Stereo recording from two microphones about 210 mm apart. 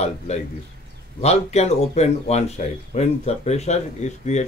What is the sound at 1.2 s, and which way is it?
Speech, 30° left (ahead or behind).